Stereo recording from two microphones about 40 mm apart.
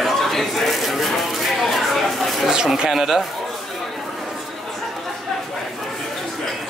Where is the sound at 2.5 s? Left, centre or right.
Centre.